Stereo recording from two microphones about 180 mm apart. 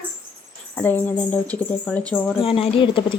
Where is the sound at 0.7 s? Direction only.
10° left (ahead or behind).